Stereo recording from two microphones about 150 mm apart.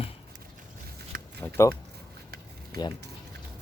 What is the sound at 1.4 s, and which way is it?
Speech, 15° left (ahead or behind).